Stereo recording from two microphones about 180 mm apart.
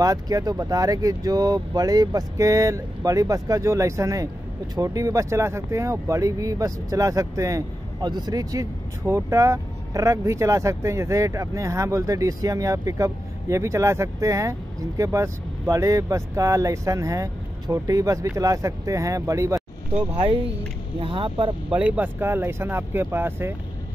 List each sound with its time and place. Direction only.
0.0 s speech: 20° right (ahead or behind)
20.2 s speech: 30° right (ahead or behind)
21.6 s speech: 10° right (ahead or behind)